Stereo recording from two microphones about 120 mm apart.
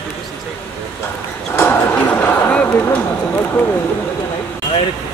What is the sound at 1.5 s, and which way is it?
Speech, 15° left (ahead or behind).